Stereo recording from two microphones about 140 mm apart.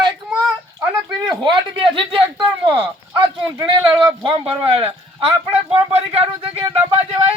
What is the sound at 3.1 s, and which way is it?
A man's voice, 30° right (ahead or behind).